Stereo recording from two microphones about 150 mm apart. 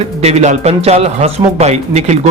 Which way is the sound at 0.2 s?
45° right (ahead or behind).